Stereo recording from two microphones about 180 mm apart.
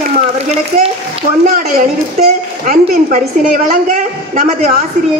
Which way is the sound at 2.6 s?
50° right (ahead or behind).